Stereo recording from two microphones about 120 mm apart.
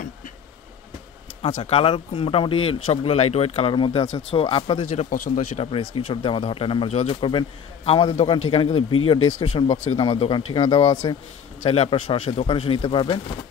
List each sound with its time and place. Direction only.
1.6 s speech: 50° left (ahead or behind)
4.1 s speech: 55° left (ahead or behind)
4.6 s speech: 40° left (ahead or behind)
4.8 s speech: 70° left (ahead or behind); by 11.1 s 35° left (ahead or behind)
11.6 s speech: 55° left (ahead or behind)